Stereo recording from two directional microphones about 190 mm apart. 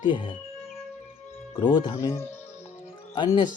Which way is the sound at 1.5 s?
20° left (ahead or behind).